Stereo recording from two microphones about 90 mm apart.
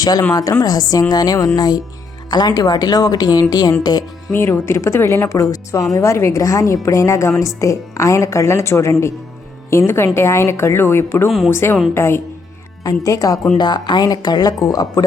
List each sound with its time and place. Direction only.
0.0 s a woman's voice: 45° left (ahead or behind)
4.3 s a woman's voice: 30° left (ahead or behind)
11.3 s speech: centre (ahead or behind)
11.5 s speech: 25° left (ahead or behind)
12.8 s a woman's voice: 40° left (ahead or behind)
13.6 s a woman's voice: 55° left (ahead or behind)